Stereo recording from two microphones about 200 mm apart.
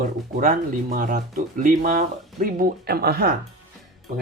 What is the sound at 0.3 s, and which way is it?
Speech, 40° right (ahead or behind).